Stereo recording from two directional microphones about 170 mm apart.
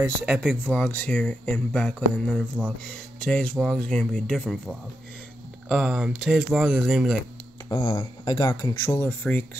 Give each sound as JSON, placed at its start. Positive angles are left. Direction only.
{"t": 0.2, "sound": "speech", "side_deg": -5}
{"t": 0.7, "sound": "speech", "side_deg": 10}
{"t": 7.7, "sound": "speech", "side_deg": 30}